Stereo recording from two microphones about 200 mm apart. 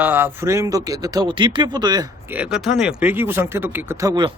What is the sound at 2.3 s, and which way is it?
Speech, 5° right (ahead or behind).